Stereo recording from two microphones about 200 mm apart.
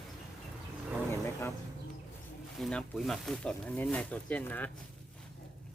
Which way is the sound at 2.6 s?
5° left (ahead or behind).